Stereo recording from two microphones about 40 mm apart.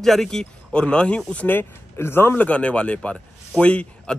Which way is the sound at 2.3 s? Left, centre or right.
Left.